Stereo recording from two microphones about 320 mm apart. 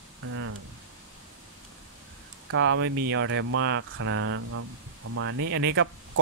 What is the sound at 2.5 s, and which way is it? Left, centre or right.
Speech, right.